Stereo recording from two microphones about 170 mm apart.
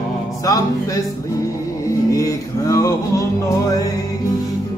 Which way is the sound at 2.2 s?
20° left (ahead or behind).